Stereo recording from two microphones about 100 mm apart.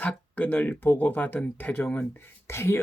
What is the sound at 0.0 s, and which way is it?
Speech, 15° left (ahead or behind).